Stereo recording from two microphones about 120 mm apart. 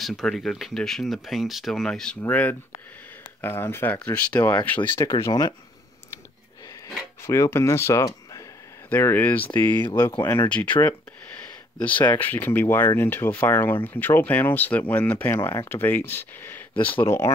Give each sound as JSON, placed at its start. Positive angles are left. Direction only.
{"t": 0.0, "sound": "speech", "side_deg": 0}
{"t": 5.0, "sound": "speech", "side_deg": 35}
{"t": 7.2, "sound": "speech", "side_deg": 25}